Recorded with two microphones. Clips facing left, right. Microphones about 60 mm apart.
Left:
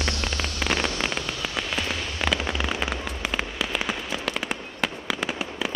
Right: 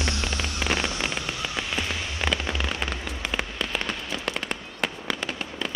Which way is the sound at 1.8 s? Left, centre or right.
Centre.